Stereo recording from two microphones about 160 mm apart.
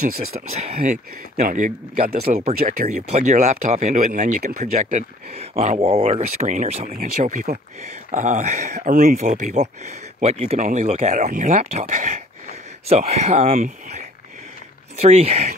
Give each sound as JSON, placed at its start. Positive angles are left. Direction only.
{"t": 0.5, "sound": "speech", "side_deg": -40}
{"t": 3.1, "sound": "speech", "side_deg": -50}
{"t": 13.4, "sound": "speech", "side_deg": -60}
{"t": 15.0, "sound": "speech", "side_deg": -40}